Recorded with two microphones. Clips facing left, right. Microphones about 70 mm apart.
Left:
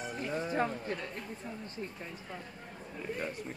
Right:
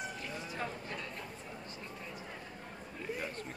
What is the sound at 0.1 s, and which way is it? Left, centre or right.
Music, left.